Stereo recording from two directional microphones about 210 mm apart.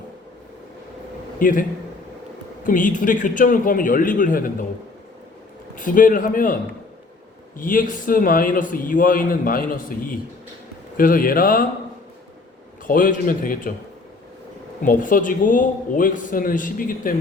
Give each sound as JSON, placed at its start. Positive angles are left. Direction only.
{"t": 1.4, "sound": "a man's voice", "side_deg": 40}
{"t": 2.6, "sound": "a man's voice", "side_deg": 40}
{"t": 5.7, "sound": "a man's voice", "side_deg": 40}
{"t": 7.6, "sound": "a man's voice", "side_deg": 40}
{"t": 12.9, "sound": "a man's voice", "side_deg": 40}
{"t": 14.8, "sound": "a man's voice", "side_deg": 40}